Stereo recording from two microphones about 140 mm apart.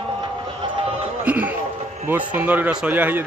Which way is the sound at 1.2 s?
10° right (ahead or behind).